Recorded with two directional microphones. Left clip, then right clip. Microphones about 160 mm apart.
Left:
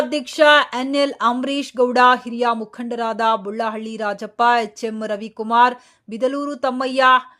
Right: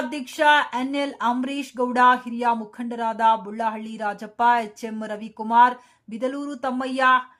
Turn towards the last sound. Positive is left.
turn(degrees=25)  # may be behind; listen again after turning